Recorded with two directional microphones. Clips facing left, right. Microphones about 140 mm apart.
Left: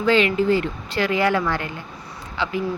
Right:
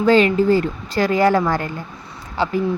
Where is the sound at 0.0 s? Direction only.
40° right (ahead or behind).